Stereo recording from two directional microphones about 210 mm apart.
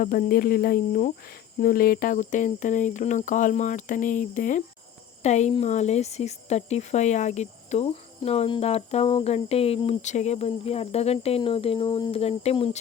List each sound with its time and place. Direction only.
0.0 s speech: 40° left (ahead or behind)